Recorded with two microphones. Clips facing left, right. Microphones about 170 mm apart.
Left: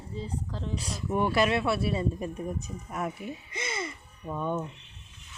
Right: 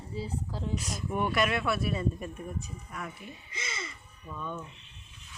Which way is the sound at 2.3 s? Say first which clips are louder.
Left 5 dB; 45° left (ahead or behind).